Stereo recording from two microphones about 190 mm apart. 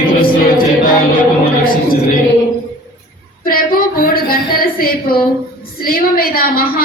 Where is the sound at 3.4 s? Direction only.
50° left (ahead or behind).